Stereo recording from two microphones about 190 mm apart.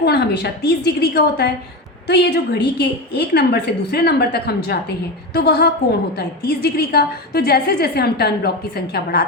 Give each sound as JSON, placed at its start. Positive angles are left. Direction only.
{"t": 0.0, "sound": "a woman's voice", "side_deg": 60}